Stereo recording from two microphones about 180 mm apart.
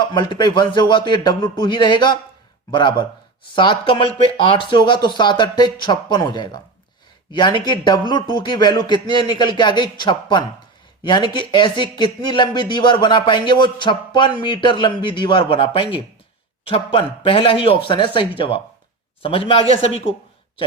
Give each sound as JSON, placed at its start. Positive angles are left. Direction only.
{"t": 0.0, "sound": "speech", "side_deg": 25}
{"t": 3.5, "sound": "a man's voice", "side_deg": 25}